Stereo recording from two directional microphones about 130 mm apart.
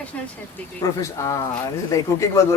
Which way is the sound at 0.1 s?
10° left (ahead or behind).